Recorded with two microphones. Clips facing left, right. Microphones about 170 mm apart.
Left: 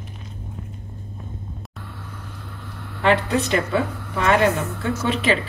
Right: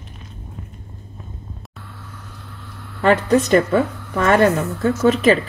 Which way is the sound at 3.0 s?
45° right (ahead or behind).